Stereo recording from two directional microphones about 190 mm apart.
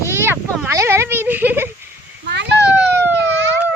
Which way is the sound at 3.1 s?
70° right (ahead or behind).